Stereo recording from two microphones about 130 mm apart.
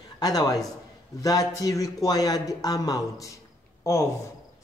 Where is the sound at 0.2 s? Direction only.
30° left (ahead or behind).